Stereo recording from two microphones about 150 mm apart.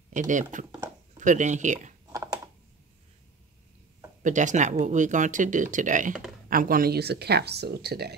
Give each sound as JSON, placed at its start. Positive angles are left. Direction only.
{"t": 0.1, "sound": "speech", "side_deg": -55}
{"t": 2.1, "sound": "typing", "side_deg": -20}
{"t": 4.2, "sound": "speech", "side_deg": -55}
{"t": 6.5, "sound": "speech", "side_deg": -70}